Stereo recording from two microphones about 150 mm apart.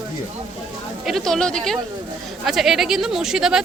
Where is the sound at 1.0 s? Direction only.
Centre (ahead or behind).